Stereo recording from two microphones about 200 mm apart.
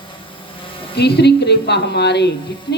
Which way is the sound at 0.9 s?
55° left (ahead or behind).